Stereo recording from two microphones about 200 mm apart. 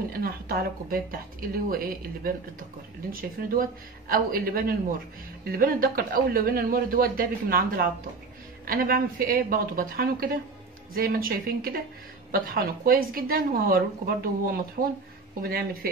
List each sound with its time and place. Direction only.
0.1 s a woman's voice: 50° right (ahead or behind)